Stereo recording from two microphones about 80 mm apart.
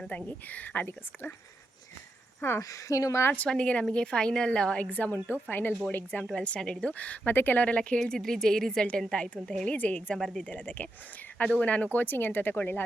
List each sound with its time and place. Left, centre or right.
0.1 s speech: centre
2.6 s speech: left
3.3 s speech: centre